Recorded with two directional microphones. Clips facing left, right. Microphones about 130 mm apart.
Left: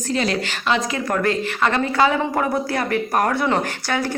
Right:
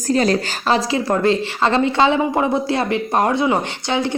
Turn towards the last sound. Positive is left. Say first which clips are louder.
# right 2 dB
turn(degrees=-20)  # may be behind; listen again after turning